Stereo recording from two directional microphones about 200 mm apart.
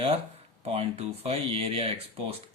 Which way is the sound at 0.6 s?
30° right (ahead or behind).